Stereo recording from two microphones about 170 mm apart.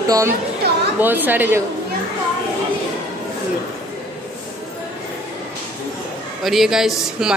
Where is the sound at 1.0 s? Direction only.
10° right (ahead or behind).